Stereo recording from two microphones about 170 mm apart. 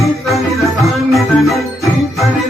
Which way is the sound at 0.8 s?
Centre (ahead or behind).